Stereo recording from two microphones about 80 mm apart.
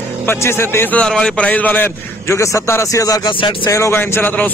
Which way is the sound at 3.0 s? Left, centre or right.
Left.